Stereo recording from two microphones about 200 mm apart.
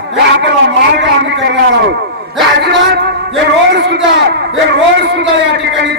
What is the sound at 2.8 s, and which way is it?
A man's voice, 55° right (ahead or behind).